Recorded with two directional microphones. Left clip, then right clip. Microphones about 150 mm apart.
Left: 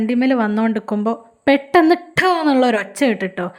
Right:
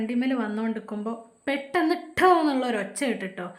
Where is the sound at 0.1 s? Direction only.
55° left (ahead or behind).